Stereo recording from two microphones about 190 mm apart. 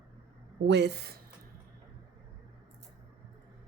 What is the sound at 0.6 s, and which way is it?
Speech, 65° right (ahead or behind).